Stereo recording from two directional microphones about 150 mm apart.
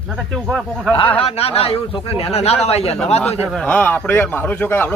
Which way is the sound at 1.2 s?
40° left (ahead or behind).